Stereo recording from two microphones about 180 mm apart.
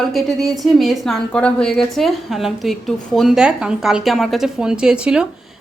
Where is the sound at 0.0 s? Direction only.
Centre (ahead or behind).